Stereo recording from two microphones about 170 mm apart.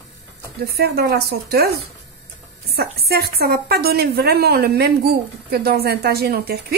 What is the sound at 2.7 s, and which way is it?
A woman's voice, 65° right (ahead or behind).